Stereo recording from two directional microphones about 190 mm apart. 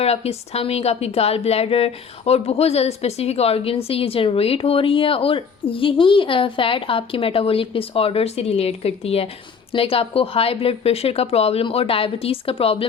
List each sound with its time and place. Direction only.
0.0 s a woman's voice: 35° left (ahead or behind)